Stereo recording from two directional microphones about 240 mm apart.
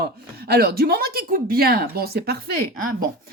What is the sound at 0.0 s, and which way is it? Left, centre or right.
Speech, right.